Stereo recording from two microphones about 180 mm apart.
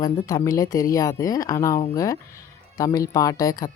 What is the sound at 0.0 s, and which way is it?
Speech, 20° left (ahead or behind).